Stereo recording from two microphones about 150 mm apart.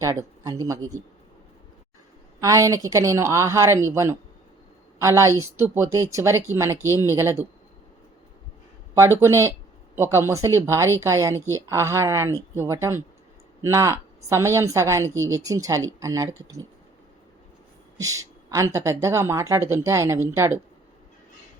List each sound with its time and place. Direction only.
0.0 s a woman's voice: 20° right (ahead or behind)
2.4 s a woman's voice: 20° right (ahead or behind)
9.0 s a woman's voice: 20° right (ahead or behind)
18.0 s a woman's voice: 20° right (ahead or behind)